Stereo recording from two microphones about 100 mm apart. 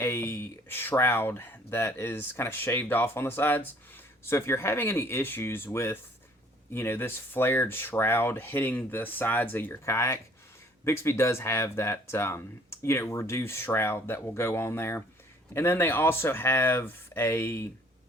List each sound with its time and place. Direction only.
0.0 s speech: 25° left (ahead or behind)